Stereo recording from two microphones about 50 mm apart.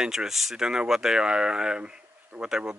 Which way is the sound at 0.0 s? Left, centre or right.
Centre.